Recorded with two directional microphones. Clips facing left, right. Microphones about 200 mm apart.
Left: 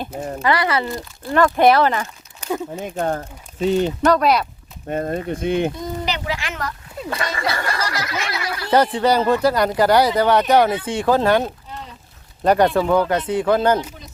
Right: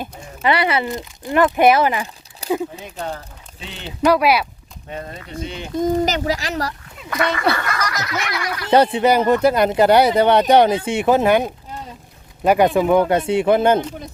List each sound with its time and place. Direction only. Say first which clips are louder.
0.4 s speech: right 2 dB; 25° right (ahead or behind)
2.4 s a sound: right 3 dB; 35° right (ahead or behind)
2.8 s speech: left 6 dB; 50° left (ahead or behind)
4.0 s speech: right 4 dB; 10° right (ahead or behind)
4.9 s speech: left 9 dB; 50° left (ahead or behind)
5.8 s speech: right 7 dB; 45° right (ahead or behind)
7.0 s speech: right 4 dB; 30° left (ahead or behind)
7.6 s a sound: even; 30° left (ahead or behind)
8.7 s speech: right 2 dB; 25° right (ahead or behind)